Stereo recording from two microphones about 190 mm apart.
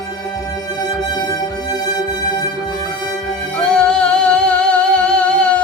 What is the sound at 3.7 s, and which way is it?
Music, 5° left (ahead or behind).